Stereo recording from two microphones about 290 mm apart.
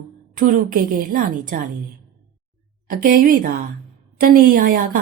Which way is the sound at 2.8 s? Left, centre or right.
Right.